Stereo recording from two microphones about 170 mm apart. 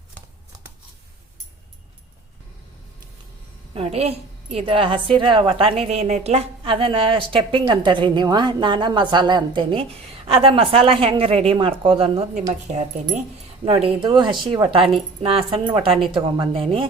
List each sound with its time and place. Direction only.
3.8 s a woman's voice: 40° right (ahead or behind)